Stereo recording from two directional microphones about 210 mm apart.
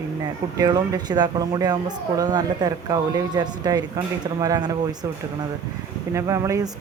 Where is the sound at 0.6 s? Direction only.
20° right (ahead or behind).